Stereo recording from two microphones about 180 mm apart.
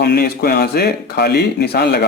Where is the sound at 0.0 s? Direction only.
65° left (ahead or behind).